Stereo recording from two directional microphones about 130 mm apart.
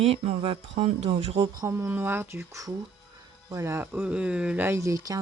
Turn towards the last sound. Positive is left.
turn(degrees=-25)  # may be behind; listen again after turning